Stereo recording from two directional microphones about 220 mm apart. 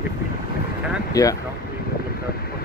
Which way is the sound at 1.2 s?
15° left (ahead or behind).